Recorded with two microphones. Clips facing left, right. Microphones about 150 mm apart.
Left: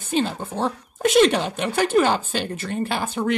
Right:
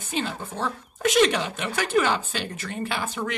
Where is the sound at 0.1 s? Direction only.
35° left (ahead or behind).